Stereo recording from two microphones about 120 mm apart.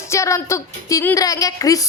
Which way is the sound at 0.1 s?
25° left (ahead or behind).